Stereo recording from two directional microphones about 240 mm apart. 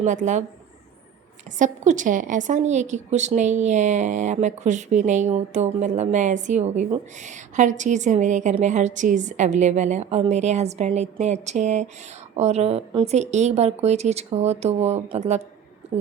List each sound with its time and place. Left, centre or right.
0.0 s a woman's voice: right
1.5 s a woman's voice: right